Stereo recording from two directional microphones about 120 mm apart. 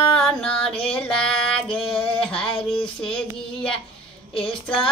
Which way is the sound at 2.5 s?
45° left (ahead or behind).